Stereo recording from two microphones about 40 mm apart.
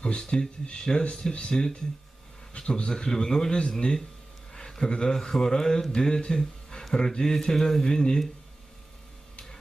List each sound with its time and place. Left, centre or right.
0.0 s speech: left